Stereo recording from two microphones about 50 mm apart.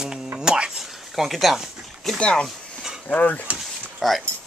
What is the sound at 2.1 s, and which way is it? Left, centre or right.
Speech, left.